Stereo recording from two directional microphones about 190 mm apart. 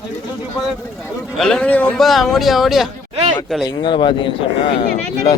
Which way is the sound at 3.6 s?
25° left (ahead or behind).